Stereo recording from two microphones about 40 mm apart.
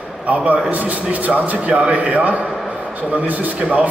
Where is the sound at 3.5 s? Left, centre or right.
Right.